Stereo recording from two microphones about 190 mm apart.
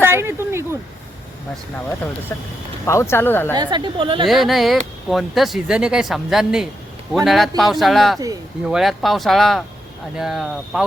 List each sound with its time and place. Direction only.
0.0 s a sound: 10° right (ahead or behind)
2.3 s speech: 15° left (ahead or behind)
3.5 s a woman's voice: 20° right (ahead or behind)
4.3 s speech: centre (ahead or behind)